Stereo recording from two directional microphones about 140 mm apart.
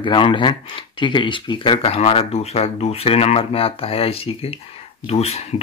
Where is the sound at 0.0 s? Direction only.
35° left (ahead or behind).